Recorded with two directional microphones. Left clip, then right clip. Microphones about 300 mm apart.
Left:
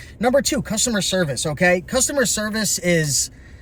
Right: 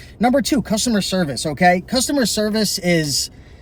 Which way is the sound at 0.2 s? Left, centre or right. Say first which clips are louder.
Right 1 dB; centre.